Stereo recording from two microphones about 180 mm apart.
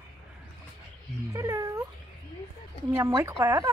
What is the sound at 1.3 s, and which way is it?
Speech, 15° right (ahead or behind).